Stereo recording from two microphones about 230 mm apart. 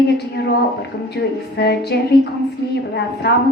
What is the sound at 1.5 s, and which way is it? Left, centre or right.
Speech, left.